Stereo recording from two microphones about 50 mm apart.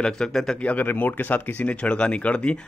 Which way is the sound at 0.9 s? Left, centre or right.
Left.